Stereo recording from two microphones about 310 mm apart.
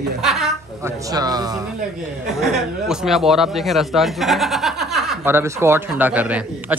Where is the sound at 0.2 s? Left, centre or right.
Centre.